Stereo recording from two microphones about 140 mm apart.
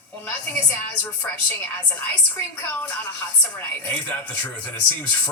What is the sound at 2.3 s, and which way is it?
Speech, 10° left (ahead or behind).